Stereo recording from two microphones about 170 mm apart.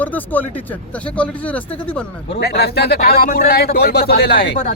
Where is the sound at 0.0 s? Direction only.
10° left (ahead or behind).